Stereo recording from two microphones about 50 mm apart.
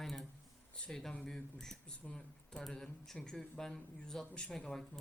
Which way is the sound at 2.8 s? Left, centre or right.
Centre.